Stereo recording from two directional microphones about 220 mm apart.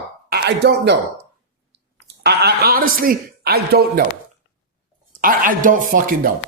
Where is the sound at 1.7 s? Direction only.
50° right (ahead or behind).